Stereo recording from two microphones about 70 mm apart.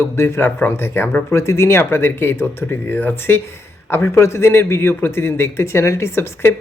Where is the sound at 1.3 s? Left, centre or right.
Left.